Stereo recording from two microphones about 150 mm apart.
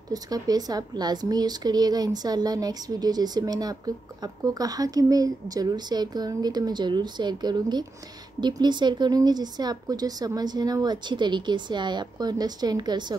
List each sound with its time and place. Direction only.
0.1 s a woman's voice: 25° right (ahead or behind)